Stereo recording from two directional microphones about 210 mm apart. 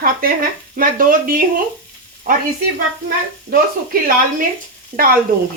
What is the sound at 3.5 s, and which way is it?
Sizzle, 45° right (ahead or behind).